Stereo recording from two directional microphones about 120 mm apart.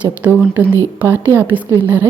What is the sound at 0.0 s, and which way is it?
A woman's voice, 15° right (ahead or behind).